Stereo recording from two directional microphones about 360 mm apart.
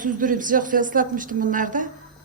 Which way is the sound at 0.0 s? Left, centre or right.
Right.